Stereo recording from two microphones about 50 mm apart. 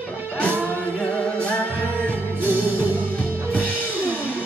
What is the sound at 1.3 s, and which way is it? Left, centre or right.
Music, left.